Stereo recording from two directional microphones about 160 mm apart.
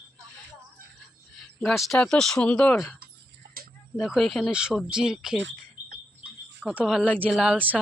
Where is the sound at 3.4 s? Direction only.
90° right.